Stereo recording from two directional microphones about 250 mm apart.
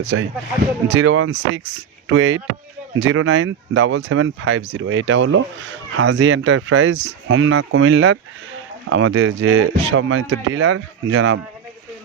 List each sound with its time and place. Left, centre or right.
0.0 s speech: right
9.5 s speech: right
9.8 s speech: right